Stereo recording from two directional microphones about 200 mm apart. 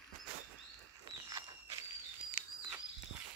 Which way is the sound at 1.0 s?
20° right (ahead or behind).